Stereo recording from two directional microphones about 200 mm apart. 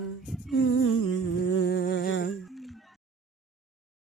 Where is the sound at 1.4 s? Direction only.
65° left (ahead or behind).